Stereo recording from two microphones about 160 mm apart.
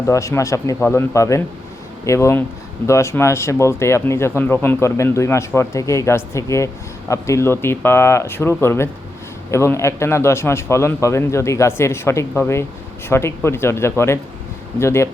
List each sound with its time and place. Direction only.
0.1 s speech: 20° left (ahead or behind)